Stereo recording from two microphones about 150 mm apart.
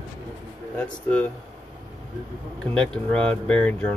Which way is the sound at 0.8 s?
10° left (ahead or behind).